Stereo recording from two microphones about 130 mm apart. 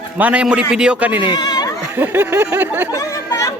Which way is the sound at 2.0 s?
15° right (ahead or behind).